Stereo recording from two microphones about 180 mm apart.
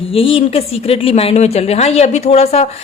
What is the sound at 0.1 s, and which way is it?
Speech, 30° left (ahead or behind).